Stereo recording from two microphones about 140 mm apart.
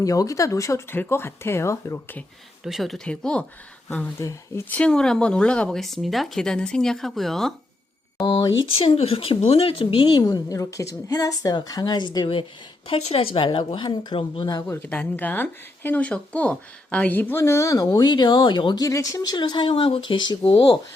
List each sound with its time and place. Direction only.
0.0 s speech: 25° left (ahead or behind)
2.6 s speech: centre (ahead or behind)
4.2 s speech: 20° left (ahead or behind)
4.7 s speech: 5° left (ahead or behind)
8.2 s speech: 35° left (ahead or behind)
14.7 s speech: 15° left (ahead or behind); by 20.7 s 40° left (ahead or behind)